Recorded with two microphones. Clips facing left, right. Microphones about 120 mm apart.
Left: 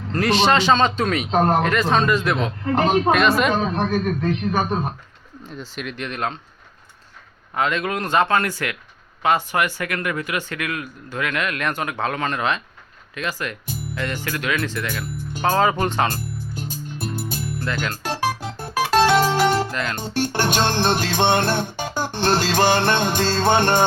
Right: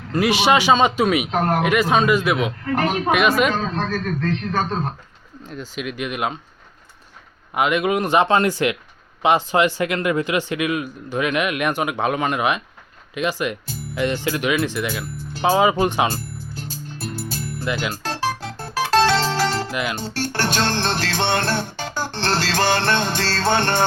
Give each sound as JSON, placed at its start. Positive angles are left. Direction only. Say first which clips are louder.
{"t": 0.1, "sound": "speech", "louder": "right 1 dB", "side_deg": -10}
{"t": 1.3, "sound": "speech", "louder": "left 2 dB", "side_deg": 25}
{"t": 1.6, "sound": "speech", "louder": "right 2 dB", "side_deg": -10}
{"t": 2.6, "sound": "speech", "louder": "left 5 dB", "side_deg": 25}
{"t": 3.1, "sound": "speech", "louder": "even", "side_deg": -5}
{"t": 3.5, "sound": "music", "louder": "left 3 dB", "side_deg": 20}
{"t": 5.5, "sound": "speech", "louder": "right 3 dB", "side_deg": 0}
{"t": 7.5, "sound": "speech", "louder": "right 4 dB", "side_deg": -15}
{"t": 16.6, "sound": "music", "louder": "left 1 dB", "side_deg": 20}
{"t": 17.6, "sound": "speech", "louder": "right 3 dB", "side_deg": -10}
{"t": 18.0, "sound": "music", "louder": "left 1 dB", "side_deg": 15}
{"t": 19.7, "sound": "speech", "louder": "right 2 dB", "side_deg": -10}
{"t": 20.0, "sound": "music", "louder": "left 2 dB", "side_deg": 15}